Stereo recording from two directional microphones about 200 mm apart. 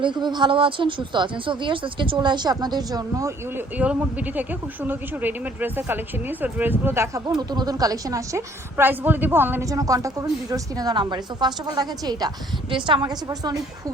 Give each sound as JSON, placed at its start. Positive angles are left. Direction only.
{"t": 0.0, "sound": "a woman's voice", "side_deg": -25}